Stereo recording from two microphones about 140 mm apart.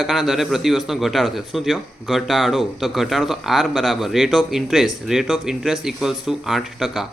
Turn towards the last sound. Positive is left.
turn(degrees=0)  # may be behind; listen again after turning